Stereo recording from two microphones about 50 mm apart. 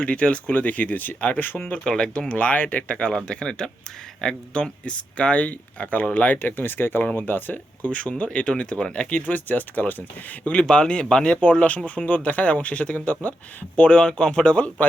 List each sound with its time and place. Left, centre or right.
0.0 s speech: left
1.8 s speech: centre; by 7.9 s left
7.9 s speech: left
10.4 s speech: left